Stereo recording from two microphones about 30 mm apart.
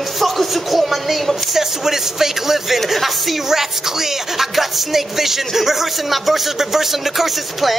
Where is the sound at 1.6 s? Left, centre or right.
Centre.